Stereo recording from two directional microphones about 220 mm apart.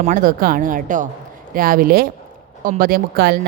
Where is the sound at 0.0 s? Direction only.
40° right (ahead or behind).